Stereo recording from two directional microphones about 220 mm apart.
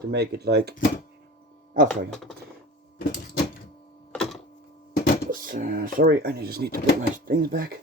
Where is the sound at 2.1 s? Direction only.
Centre (ahead or behind).